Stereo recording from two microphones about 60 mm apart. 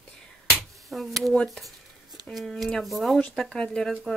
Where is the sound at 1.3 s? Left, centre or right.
Centre.